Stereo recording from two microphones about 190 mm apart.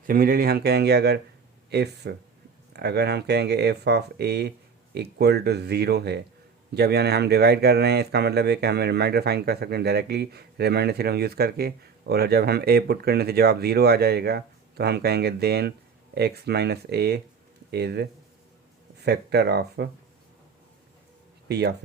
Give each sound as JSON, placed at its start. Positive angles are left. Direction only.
{"t": 0.0, "sound": "speech", "side_deg": -50}
{"t": 21.5, "sound": "speech", "side_deg": -60}